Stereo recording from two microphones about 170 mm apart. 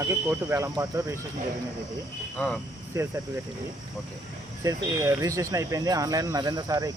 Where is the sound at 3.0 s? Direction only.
20° right (ahead or behind).